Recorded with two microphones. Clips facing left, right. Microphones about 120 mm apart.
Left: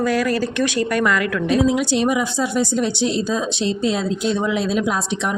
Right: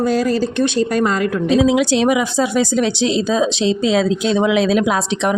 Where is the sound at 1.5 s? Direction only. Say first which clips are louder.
Right 4 dB; 90° right.